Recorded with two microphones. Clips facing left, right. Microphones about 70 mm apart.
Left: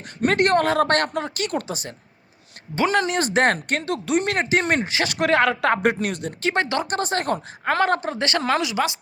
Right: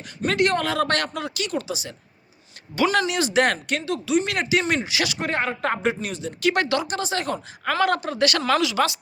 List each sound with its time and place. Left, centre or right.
0.2 s speech: left
2.7 s speech: left
4.9 s speech: left
5.2 s a woman's voice: left
6.4 s a woman's voice: left
6.8 s speech: left
7.6 s a woman's voice: left